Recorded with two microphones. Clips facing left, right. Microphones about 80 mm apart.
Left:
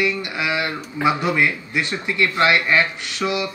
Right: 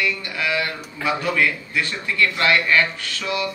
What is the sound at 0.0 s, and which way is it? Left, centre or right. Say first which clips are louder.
A man's voice: left 2 dB; centre.